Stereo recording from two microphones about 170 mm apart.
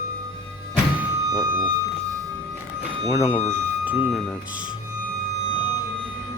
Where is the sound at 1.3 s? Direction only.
25° right (ahead or behind).